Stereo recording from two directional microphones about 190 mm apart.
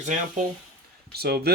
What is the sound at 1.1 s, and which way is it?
Speech, 55° right (ahead or behind).